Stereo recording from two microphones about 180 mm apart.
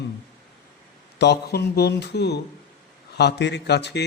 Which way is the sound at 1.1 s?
65° left (ahead or behind).